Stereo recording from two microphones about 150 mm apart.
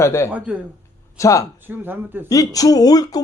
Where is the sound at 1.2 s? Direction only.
20° left (ahead or behind).